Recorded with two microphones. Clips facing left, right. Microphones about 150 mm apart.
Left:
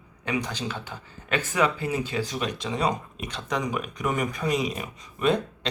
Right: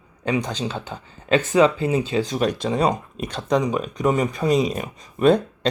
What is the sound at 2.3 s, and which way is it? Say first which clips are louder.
Speech: right 8 dB; 40° right (ahead or behind).